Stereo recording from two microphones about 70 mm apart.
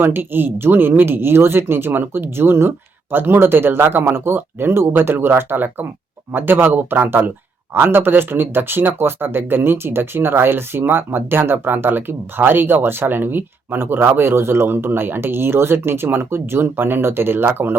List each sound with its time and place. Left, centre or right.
0.0 s speech: right